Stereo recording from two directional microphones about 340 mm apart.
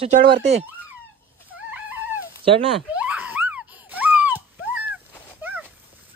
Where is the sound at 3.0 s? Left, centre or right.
Centre.